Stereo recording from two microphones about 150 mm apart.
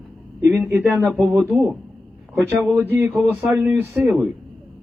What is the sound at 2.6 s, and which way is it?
Speech, 15° right (ahead or behind).